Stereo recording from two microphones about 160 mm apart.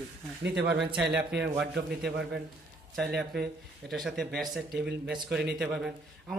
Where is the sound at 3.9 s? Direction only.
Centre (ahead or behind).